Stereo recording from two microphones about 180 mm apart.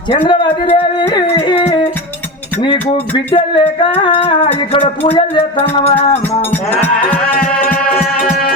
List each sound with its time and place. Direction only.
0.3 s music: 30° left (ahead or behind)
3.3 s music: 30° left (ahead or behind)
7.5 s music: 10° left (ahead or behind)